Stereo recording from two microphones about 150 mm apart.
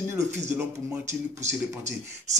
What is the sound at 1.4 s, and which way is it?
Speech, 50° right (ahead or behind).